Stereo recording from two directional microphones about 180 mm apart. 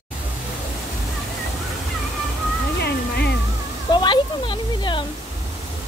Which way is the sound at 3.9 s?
25° left (ahead or behind).